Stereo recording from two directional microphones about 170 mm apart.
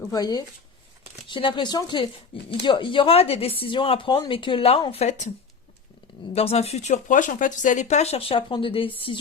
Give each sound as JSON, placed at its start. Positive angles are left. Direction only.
{"t": 0.1, "sound": "speech", "side_deg": 20}
{"t": 6.3, "sound": "speech", "side_deg": 35}